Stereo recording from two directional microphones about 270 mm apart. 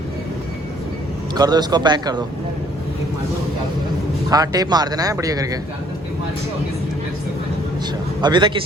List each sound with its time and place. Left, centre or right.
1.4 s speech: centre
4.3 s speech: centre
8.2 s speech: centre